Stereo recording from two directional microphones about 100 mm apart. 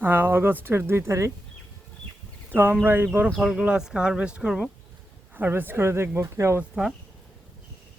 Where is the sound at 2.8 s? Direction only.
20° right (ahead or behind).